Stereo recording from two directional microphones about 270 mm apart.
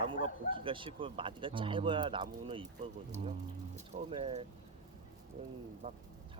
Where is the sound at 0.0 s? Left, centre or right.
Centre.